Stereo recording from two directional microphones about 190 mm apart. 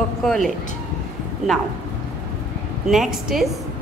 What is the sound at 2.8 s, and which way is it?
Speech, centre (ahead or behind).